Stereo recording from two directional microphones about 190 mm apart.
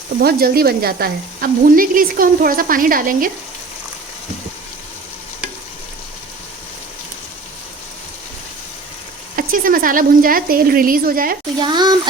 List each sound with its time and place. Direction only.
0.2 s speech: 55° right (ahead or behind)
9.3 s a woman's voice: 45° right (ahead or behind)
11.6 s a child's voice: 25° right (ahead or behind)